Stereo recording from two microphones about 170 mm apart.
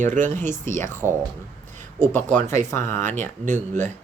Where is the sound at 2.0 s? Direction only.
10° left (ahead or behind).